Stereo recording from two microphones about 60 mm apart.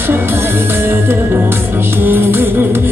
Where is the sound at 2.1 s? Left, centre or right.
Right.